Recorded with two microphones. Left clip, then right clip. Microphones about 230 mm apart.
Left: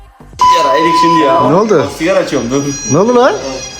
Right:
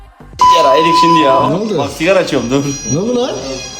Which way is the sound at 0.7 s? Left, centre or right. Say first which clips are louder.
Right 1 dB; centre.